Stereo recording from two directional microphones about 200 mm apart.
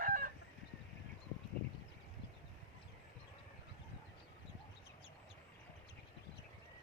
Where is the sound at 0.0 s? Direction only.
45° right (ahead or behind).